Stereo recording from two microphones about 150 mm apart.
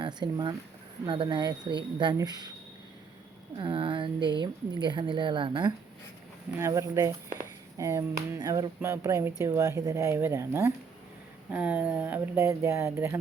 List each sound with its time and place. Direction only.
0.0 s a woman's voice: 30° right (ahead or behind)
3.6 s a woman's voice: 35° right (ahead or behind)
6.6 s speech: 20° right (ahead or behind)